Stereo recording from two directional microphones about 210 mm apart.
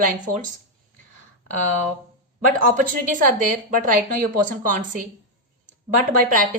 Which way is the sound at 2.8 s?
40° right (ahead or behind).